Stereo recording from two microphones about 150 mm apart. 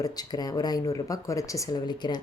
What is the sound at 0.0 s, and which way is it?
Speech, 25° left (ahead or behind).